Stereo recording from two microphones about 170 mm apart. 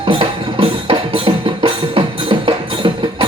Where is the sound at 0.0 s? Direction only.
35° right (ahead or behind).